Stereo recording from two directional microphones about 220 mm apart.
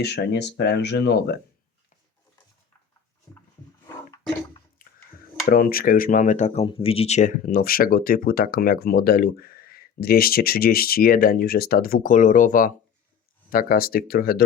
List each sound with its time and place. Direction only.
0.0 s speech: 50° left (ahead or behind)
4.8 s a sound: 40° left (ahead or behind)
5.5 s speech: 40° left (ahead or behind)